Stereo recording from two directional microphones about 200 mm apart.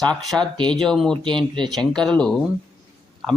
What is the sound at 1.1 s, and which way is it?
Speech, 25° right (ahead or behind).